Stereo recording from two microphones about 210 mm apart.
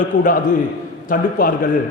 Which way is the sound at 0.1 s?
40° left (ahead or behind).